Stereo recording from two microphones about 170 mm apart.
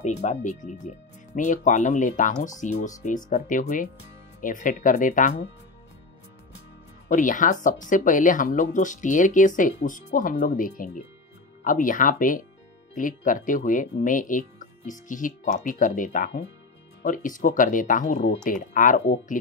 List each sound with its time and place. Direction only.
0.0 s speech: 40° left (ahead or behind)
7.1 s speech: 50° left (ahead or behind)